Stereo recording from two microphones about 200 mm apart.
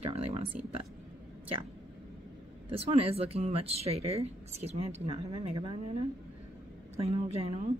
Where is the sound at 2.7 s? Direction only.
30° right (ahead or behind).